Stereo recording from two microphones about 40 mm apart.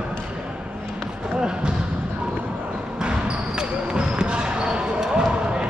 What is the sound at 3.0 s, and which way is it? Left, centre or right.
Basketball bounce, right.